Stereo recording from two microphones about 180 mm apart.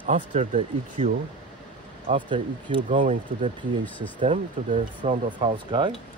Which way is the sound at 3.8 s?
10° left (ahead or behind).